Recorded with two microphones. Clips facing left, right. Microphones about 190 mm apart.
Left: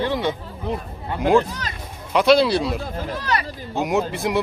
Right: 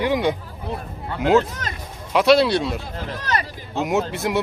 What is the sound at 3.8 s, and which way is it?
Speech, centre (ahead or behind).